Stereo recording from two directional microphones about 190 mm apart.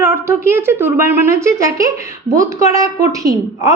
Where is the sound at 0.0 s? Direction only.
15° right (ahead or behind).